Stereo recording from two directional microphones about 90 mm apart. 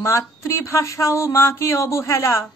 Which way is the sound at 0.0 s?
35° left (ahead or behind).